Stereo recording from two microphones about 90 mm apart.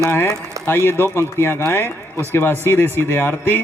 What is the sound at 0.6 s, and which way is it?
Speech, 25° left (ahead or behind).